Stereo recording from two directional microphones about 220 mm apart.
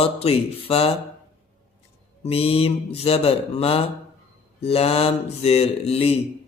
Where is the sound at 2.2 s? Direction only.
25° left (ahead or behind).